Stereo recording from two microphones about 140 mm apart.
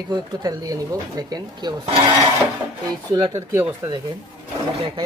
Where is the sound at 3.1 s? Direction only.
25° right (ahead or behind).